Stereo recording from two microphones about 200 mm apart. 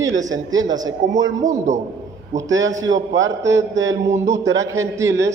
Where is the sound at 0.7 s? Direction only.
20° right (ahead or behind).